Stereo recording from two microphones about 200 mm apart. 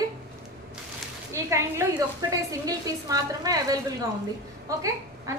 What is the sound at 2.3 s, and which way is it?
A woman's voice, 15° right (ahead or behind).